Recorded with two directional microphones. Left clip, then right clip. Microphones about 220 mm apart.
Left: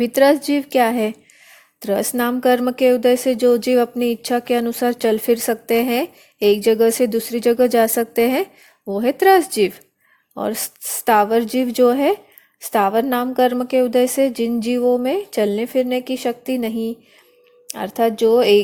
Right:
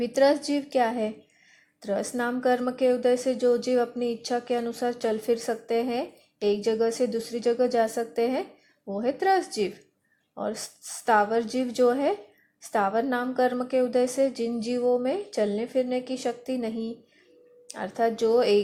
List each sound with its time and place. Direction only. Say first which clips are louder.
0.0 s speech: left 8 dB; 45° left (ahead or behind)